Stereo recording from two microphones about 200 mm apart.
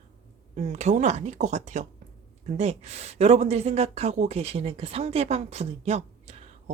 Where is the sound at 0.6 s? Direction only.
35° right (ahead or behind).